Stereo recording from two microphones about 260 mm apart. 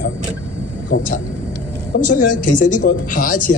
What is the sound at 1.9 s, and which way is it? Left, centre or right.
A man's voice, left.